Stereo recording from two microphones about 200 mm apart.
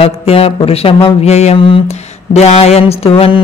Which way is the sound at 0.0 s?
30° left (ahead or behind).